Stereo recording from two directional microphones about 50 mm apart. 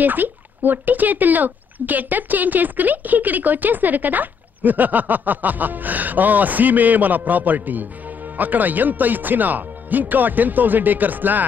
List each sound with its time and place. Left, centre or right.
0.0 s speech: right